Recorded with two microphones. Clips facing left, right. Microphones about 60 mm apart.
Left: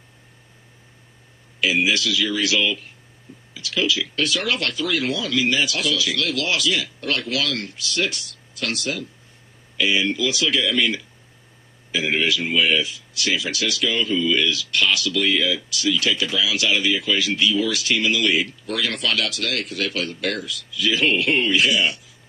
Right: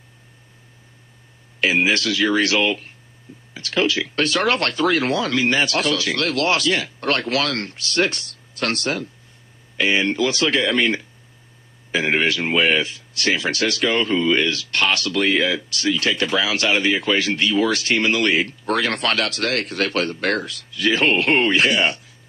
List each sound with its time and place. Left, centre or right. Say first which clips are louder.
1.6 s speech: right 2 dB; right